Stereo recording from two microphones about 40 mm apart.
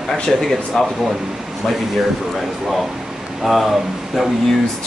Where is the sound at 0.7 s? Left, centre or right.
Centre.